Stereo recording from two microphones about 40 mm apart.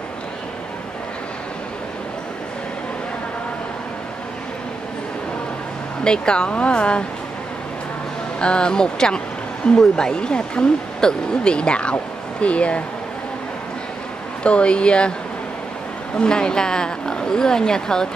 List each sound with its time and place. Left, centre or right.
6.0 s speech: left
8.4 s speech: left
14.4 s speech: left
16.2 s speech: left